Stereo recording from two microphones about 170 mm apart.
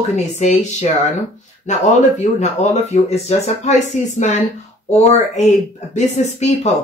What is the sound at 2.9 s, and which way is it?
Speech, 40° left (ahead or behind).